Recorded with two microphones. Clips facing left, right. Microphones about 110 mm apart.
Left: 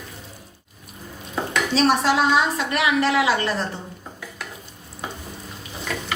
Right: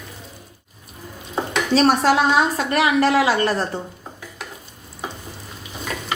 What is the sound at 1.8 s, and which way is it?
A woman's voice, 45° right (ahead or behind).